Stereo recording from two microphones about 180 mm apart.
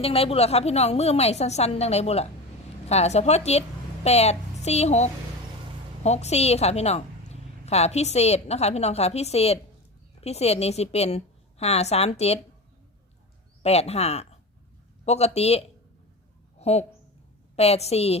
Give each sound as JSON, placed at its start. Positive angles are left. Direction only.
{"t": 0.0, "sound": "a woman's voice", "side_deg": 35}
{"t": 13.6, "sound": "a woman's voice", "side_deg": 35}
{"t": 16.6, "sound": "a sound", "side_deg": 35}
{"t": 17.6, "sound": "a woman's voice", "side_deg": 35}